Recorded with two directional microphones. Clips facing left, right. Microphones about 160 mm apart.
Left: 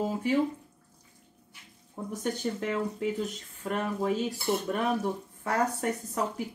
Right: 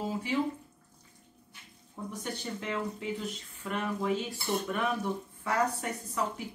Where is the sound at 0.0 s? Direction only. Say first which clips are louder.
Left 5 dB; 50° left (ahead or behind).